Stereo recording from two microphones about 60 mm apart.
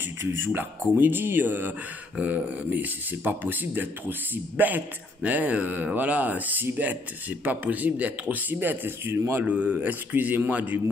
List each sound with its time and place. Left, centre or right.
0.0 s speech: right
9.4 s speech: right